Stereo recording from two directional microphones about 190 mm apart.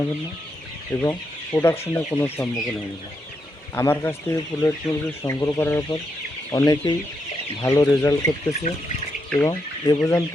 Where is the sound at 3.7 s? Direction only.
10° left (ahead or behind).